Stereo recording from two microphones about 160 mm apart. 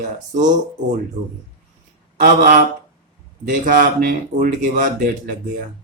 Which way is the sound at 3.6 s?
60° right (ahead or behind).